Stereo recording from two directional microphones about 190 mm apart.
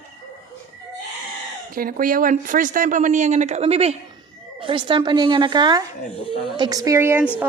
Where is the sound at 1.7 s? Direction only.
50° right (ahead or behind).